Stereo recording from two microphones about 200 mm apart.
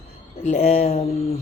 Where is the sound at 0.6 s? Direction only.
30° left (ahead or behind).